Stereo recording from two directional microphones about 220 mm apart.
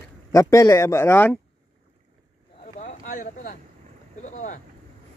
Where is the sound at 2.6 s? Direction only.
30° left (ahead or behind).